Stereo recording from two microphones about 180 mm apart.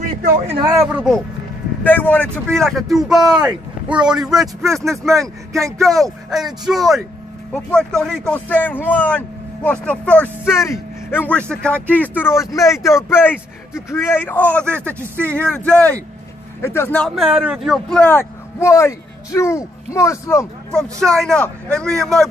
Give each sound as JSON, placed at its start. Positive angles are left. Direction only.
{"t": 0.7, "sound": "speech", "side_deg": -10}
{"t": 1.8, "sound": "speech", "side_deg": 10}
{"t": 17.1, "sound": "speech", "side_deg": -5}
{"t": 21.0, "sound": "speech", "side_deg": 5}